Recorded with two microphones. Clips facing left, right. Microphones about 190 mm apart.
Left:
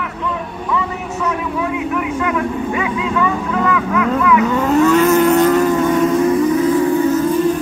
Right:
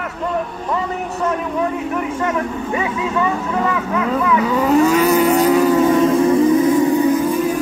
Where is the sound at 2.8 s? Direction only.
25° right (ahead or behind).